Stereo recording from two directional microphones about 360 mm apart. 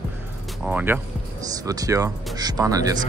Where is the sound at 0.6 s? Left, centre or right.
Centre.